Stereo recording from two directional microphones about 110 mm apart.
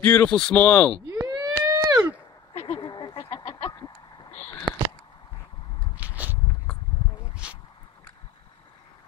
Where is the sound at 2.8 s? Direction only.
45° left (ahead or behind).